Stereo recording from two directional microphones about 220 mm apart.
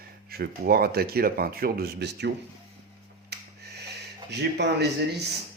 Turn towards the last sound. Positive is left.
turn(degrees=-50)  # may be behind; listen again after turning